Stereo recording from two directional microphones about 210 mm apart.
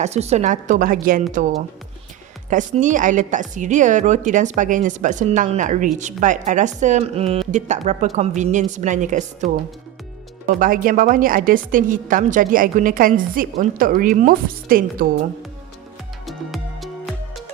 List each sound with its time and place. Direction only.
0.0 s a woman's voice: 30° right (ahead or behind)
16.2 s music: centre (ahead or behind)